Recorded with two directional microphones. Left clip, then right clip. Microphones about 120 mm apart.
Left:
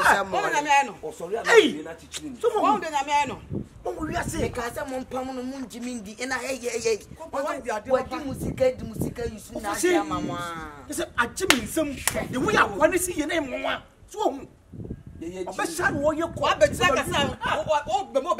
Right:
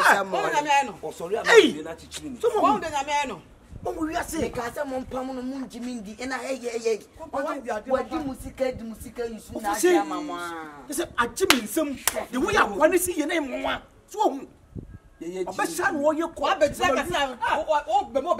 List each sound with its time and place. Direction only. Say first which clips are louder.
0.0 s bow-wow: right 1 dB; 5° right (ahead or behind)
1.0 s speech: right 1 dB; 25° right (ahead or behind)
1.4 s a man's voice: right 1 dB; 15° right (ahead or behind)
2.6 s a man's voice: even; centre (ahead or behind)
4.5 s speech: right 1 dB; 5° left (ahead or behind)
9.7 s speech: right 2 dB; 5° right (ahead or behind)
10.0 s speech: left 1 dB; 15° left (ahead or behind)
10.9 s a man's voice: even; 5° right (ahead or behind)
16.3 s speech: left 1 dB; 10° left (ahead or behind)